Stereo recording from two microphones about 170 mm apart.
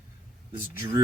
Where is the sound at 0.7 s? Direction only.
15° right (ahead or behind).